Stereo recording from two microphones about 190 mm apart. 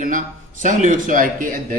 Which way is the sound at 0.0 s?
45° right (ahead or behind).